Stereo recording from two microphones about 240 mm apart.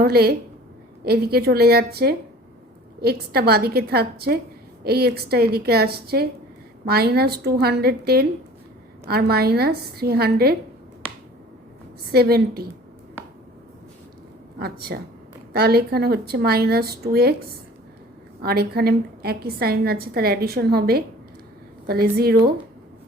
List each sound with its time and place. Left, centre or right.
0.0 s a woman's voice: right
12.1 s a woman's voice: right
14.6 s a woman's voice: right
18.4 s a woman's voice: right